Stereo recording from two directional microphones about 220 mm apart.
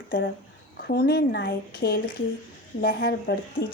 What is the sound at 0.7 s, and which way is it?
A woman's voice, 45° left (ahead or behind).